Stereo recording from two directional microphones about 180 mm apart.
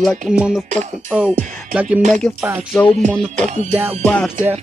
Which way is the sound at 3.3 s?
40° right (ahead or behind).